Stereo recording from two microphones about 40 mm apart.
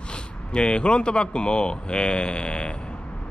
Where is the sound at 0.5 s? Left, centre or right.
Left.